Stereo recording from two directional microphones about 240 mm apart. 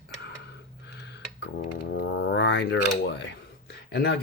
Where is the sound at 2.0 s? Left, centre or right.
Left.